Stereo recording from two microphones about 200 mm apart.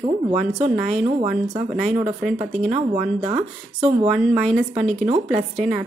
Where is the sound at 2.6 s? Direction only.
40° right (ahead or behind).